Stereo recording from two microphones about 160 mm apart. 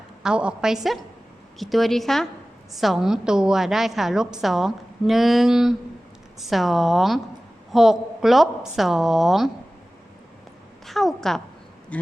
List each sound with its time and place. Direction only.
0.2 s a woman's voice: 5° right (ahead or behind)
10.8 s a woman's voice: centre (ahead or behind)